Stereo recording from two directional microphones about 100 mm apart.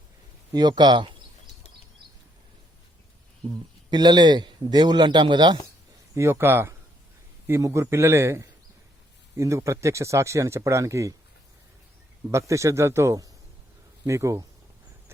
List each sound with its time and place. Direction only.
0.5 s a man's voice: 45° right (ahead or behind)
3.9 s a man's voice: 45° right (ahead or behind)
6.1 s speech: 25° right (ahead or behind)
12.3 s a man's voice: 30° right (ahead or behind)